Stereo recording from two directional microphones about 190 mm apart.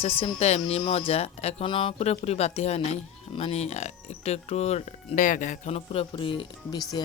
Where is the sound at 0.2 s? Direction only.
35° left (ahead or behind).